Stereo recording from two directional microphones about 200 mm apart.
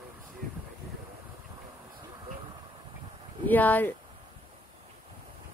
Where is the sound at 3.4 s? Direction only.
10° left (ahead or behind).